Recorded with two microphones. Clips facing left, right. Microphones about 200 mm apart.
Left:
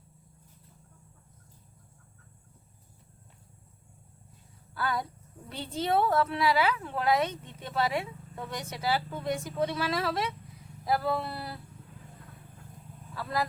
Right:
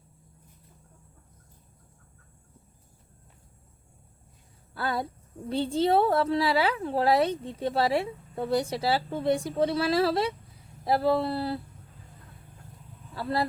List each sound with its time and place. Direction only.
4.7 s a woman's voice: 30° right (ahead or behind)
13.1 s speech: 30° right (ahead or behind)